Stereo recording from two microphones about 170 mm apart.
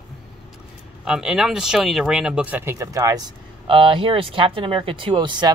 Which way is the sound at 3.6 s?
30° right (ahead or behind).